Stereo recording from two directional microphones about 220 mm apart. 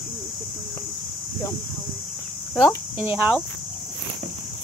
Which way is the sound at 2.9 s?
5° right (ahead or behind).